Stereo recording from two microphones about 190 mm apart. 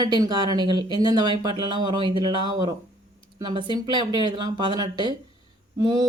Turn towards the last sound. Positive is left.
turn(degrees=-20)  # may be behind; listen again after turning